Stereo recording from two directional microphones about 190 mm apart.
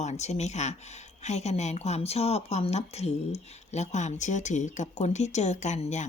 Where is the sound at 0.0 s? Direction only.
35° left (ahead or behind).